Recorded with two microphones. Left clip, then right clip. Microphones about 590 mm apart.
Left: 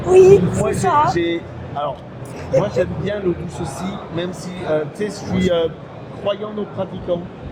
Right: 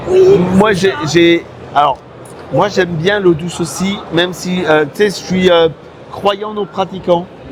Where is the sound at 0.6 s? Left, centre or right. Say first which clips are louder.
Right 3 dB; right.